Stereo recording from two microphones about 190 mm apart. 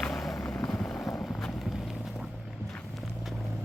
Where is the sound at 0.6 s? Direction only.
Centre (ahead or behind).